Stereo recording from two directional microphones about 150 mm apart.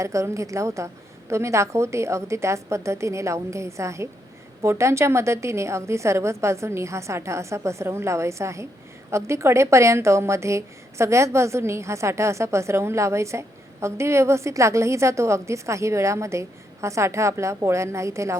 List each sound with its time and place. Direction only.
0.0 s a woman's voice: 20° right (ahead or behind)